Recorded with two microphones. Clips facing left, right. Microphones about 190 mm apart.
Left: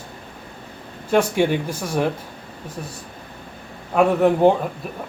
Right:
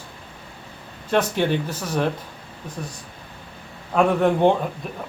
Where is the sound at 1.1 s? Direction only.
10° left (ahead or behind).